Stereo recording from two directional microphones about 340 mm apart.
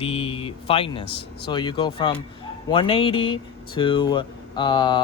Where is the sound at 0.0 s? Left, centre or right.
Centre.